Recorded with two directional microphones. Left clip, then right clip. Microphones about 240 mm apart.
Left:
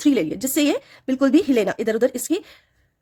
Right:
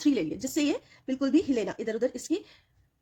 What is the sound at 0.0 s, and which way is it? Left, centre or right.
A woman's voice, left.